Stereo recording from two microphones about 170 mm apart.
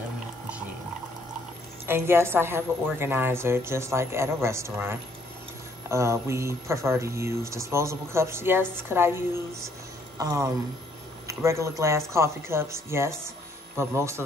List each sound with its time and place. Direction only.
1.9 s speech: 15° right (ahead or behind)